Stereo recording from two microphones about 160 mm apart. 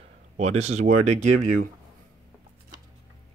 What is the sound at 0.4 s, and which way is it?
Speech, 45° right (ahead or behind).